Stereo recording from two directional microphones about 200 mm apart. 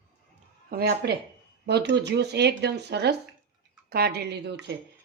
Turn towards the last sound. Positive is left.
turn(degrees=-60)  # may be behind; listen again after turning